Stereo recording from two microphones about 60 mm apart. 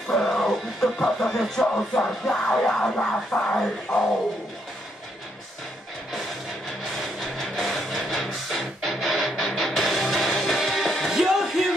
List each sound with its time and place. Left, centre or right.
0.1 s speech: centre
7.0 s music: centre